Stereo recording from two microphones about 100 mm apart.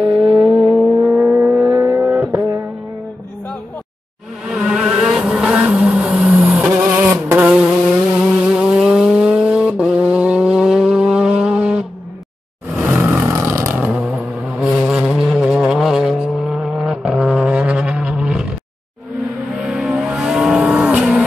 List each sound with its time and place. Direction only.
0.0 s vehicle: 10° right (ahead or behind)
0.6 s a sound: centre (ahead or behind)
1.0 s vehicle: 15° right (ahead or behind)
4.5 s vehicle: 10° right (ahead or behind)
6.8 s a sound: 25° right (ahead or behind)
8.2 s vehicle: 10° right (ahead or behind)
12.8 s vehicle: 15° right (ahead or behind)
13.2 s vehicle: 30° right (ahead or behind)
13.8 s vehicle: 10° right (ahead or behind)
19.5 s vehicle: 5° right (ahead or behind)